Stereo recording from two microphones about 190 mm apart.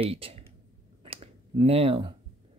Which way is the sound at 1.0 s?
30° right (ahead or behind).